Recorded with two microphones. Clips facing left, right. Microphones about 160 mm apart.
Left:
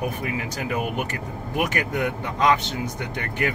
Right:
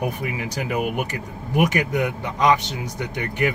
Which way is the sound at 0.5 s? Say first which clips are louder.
Right 4 dB; 15° right (ahead or behind).